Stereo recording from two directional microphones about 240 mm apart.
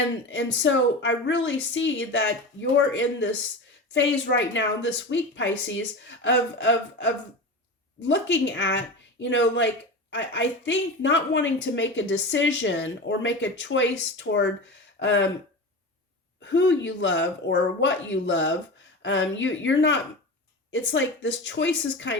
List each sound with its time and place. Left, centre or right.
0.3 s speech: left
16.4 s speech: left